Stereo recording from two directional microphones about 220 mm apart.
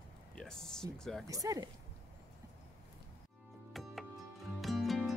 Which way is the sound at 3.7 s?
Centre (ahead or behind).